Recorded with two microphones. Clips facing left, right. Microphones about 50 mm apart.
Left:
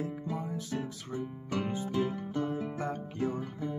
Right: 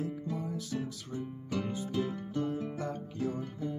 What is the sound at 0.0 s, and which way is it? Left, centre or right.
Music, left.